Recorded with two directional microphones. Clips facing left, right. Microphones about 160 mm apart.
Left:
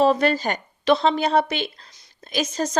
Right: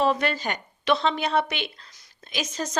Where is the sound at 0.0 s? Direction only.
35° left (ahead or behind).